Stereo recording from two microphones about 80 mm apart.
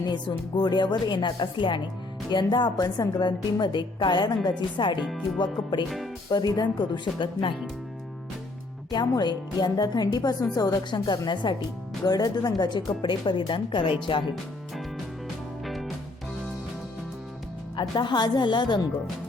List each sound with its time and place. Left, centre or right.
0.0 s speech: left
2.3 s speech: left
4.4 s speech: left
6.3 s speech: left
8.9 s speech: left
15.6 s music: centre
17.7 s speech: left